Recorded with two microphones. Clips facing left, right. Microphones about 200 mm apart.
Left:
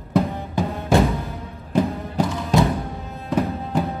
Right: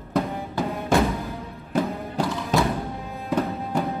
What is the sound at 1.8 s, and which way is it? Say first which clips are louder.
Music: left 3 dB; centre (ahead or behind).